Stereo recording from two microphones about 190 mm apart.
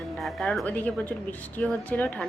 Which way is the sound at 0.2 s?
Centre (ahead or behind).